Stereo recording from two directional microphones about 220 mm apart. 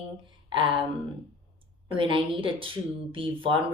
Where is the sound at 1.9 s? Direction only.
25° right (ahead or behind).